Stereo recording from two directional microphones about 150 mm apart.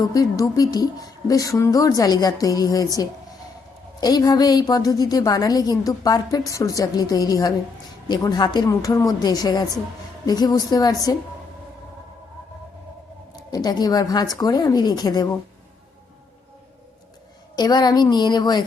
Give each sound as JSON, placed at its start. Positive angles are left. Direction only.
{"t": 0.0, "sound": "a woman's voice", "side_deg": 25}
{"t": 13.3, "sound": "a woman's voice", "side_deg": 25}
{"t": 17.5, "sound": "a woman's voice", "side_deg": 30}